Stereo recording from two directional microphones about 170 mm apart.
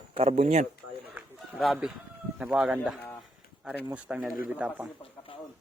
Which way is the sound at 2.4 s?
5° right (ahead or behind).